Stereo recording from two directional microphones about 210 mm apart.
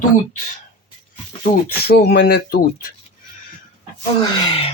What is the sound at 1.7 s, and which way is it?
Speech, 50° left (ahead or behind).